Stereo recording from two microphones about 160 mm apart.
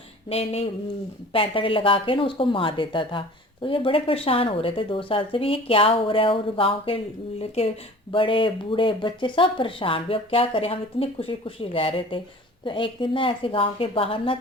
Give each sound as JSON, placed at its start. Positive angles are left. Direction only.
{"t": 0.3, "sound": "speech", "side_deg": 40}